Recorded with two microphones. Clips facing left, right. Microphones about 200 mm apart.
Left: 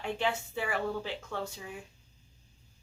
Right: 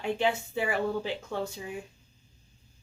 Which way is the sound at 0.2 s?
15° right (ahead or behind).